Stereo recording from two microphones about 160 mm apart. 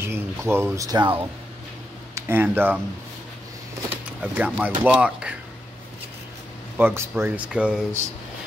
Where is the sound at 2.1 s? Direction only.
15° right (ahead or behind).